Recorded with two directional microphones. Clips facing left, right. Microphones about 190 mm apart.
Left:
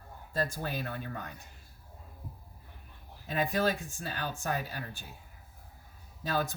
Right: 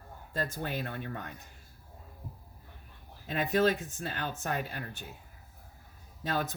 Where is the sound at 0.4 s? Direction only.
20° right (ahead or behind).